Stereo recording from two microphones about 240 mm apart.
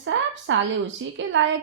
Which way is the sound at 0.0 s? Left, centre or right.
Right.